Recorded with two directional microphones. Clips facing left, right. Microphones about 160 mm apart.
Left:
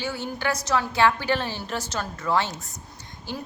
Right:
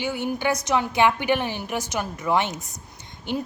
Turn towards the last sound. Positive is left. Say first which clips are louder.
# right 6 dB
turn(degrees=-20)  # may be behind; listen again after turning